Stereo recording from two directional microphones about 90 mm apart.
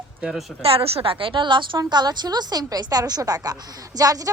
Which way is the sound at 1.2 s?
65° right (ahead or behind).